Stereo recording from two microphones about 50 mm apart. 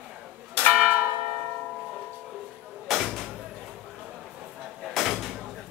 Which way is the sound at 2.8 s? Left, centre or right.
Centre.